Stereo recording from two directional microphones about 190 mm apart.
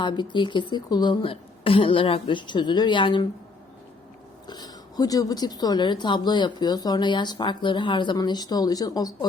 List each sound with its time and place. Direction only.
0.0 s speech: 25° left (ahead or behind)
4.4 s speech: 20° left (ahead or behind)